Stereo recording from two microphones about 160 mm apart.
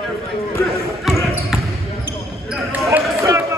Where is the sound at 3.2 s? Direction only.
20° right (ahead or behind).